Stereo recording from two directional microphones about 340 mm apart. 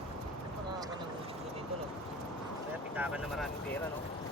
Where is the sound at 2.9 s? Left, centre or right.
Centre.